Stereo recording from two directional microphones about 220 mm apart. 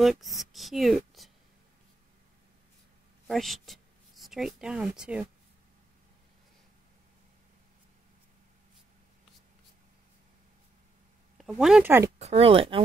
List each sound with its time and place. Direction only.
0.0 s speech: centre (ahead or behind)
3.3 s speech: centre (ahead or behind)
11.3 s speech: centre (ahead or behind)
12.2 s speech: 25° right (ahead or behind)